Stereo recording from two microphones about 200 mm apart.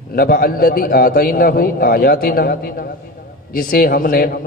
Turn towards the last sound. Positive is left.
turn(degrees=50)  # may be behind; listen again after turning